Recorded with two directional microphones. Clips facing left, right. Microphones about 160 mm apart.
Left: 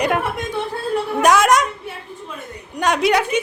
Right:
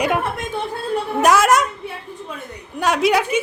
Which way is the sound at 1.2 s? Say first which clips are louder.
Even; 5° right (ahead or behind).